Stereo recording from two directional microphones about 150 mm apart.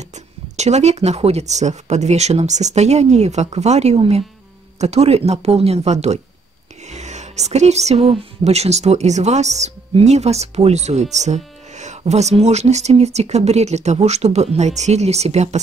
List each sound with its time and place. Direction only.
0.1 s speech: 50° right (ahead or behind)